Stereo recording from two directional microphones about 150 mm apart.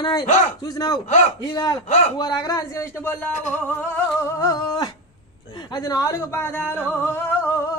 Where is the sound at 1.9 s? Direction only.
50° left (ahead or behind).